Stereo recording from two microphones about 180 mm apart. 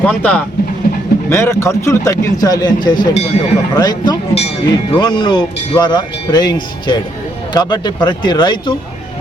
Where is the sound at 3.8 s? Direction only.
25° left (ahead or behind).